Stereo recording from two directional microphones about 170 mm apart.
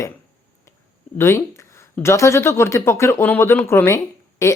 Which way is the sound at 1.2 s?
15° left (ahead or behind).